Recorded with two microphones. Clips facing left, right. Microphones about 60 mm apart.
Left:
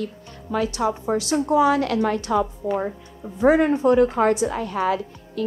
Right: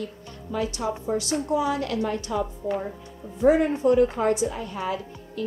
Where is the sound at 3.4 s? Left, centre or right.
Left.